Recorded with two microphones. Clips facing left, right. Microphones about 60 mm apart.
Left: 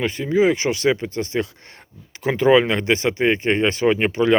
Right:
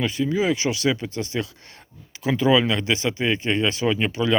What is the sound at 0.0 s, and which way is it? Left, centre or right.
Speech, left.